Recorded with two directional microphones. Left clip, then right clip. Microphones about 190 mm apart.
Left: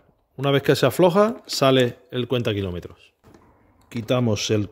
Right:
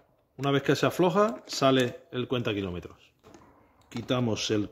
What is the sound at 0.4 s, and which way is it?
Speech, 45° left (ahead or behind).